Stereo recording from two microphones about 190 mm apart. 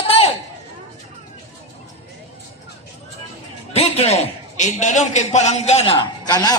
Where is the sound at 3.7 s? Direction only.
35° left (ahead or behind).